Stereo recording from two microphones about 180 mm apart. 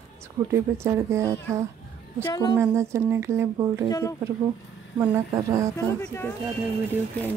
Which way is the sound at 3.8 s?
20° left (ahead or behind).